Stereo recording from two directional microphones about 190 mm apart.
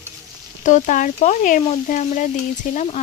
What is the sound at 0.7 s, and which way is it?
Speech, 40° left (ahead or behind).